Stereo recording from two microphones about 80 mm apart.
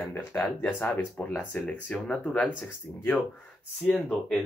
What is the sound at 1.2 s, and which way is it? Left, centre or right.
Speech, centre.